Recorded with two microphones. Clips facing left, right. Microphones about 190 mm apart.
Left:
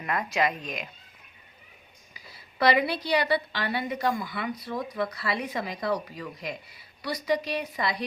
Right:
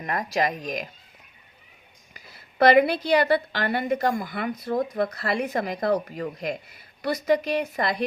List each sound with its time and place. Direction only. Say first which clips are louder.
0.0 s speech: right 2 dB; 40° right (ahead or behind)
2.1 s a woman's voice: right 7 dB; 50° right (ahead or behind)